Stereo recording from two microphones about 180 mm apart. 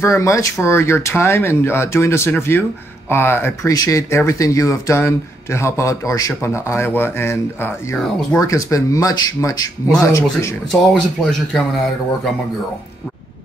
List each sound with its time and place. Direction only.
0.0 s speech: 15° left (ahead or behind)
10.7 s speech: centre (ahead or behind)